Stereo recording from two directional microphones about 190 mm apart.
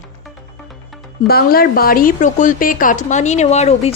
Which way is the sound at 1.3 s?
50° left (ahead or behind).